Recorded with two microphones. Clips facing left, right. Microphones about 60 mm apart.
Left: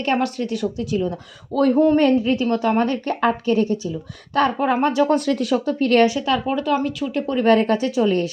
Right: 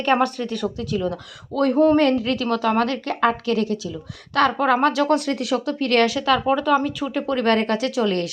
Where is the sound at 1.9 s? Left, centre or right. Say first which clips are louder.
Left 2 dB; right.